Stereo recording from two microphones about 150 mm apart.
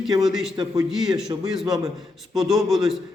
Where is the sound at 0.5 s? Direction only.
25° right (ahead or behind).